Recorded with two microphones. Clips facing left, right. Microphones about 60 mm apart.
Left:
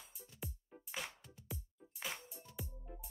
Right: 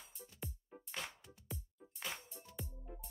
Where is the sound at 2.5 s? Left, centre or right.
Centre.